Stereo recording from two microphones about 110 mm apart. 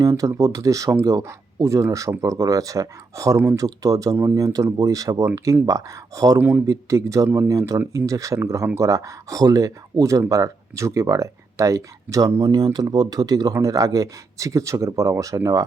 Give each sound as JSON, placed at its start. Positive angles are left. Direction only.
{"t": 0.0, "sound": "speech", "side_deg": -30}
{"t": 12.4, "sound": "speech", "side_deg": -40}